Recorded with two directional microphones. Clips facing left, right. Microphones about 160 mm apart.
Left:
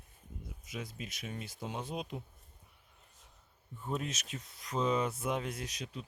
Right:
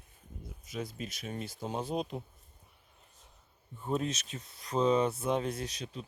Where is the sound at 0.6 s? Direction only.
35° right (ahead or behind).